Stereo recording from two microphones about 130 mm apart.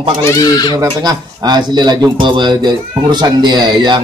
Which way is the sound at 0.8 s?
30° right (ahead or behind).